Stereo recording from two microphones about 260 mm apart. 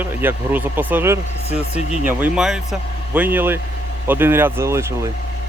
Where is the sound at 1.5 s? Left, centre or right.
Left.